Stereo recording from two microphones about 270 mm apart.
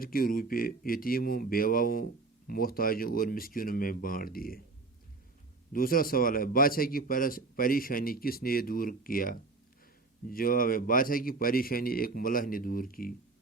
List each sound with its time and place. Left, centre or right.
0.0 s a man's voice: left
5.7 s a man's voice: left